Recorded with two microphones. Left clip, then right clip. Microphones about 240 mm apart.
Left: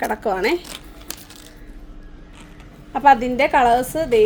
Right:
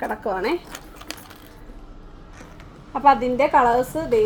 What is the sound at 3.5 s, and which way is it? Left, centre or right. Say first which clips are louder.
Speech: left 2 dB; centre.